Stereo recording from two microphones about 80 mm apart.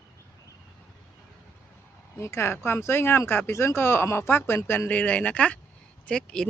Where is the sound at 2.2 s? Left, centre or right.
Left; by 6.5 s centre.